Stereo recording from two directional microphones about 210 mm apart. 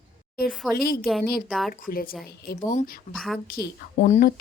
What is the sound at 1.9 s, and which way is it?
Speech, 45° left (ahead or behind).